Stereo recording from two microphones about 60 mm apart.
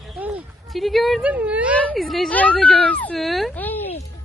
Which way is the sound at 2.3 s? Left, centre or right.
Left.